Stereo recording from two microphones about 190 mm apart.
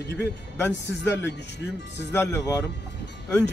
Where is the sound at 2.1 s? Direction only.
15° left (ahead or behind).